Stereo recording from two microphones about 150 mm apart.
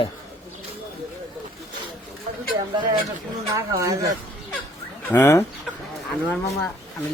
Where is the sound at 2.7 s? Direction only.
25° right (ahead or behind).